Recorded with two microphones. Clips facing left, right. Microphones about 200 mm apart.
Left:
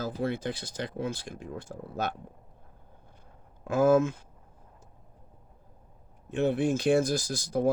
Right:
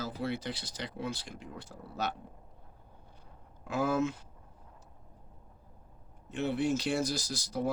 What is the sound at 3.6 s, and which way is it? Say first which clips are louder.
Speech: left 8 dB; 50° left (ahead or behind).